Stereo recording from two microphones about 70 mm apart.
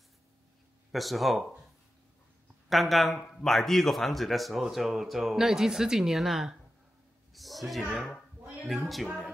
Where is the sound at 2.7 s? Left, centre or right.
Centre.